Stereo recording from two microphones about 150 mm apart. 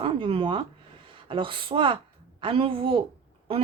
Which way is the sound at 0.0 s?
35° right (ahead or behind).